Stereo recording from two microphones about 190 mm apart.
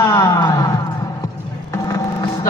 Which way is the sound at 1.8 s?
20° left (ahead or behind).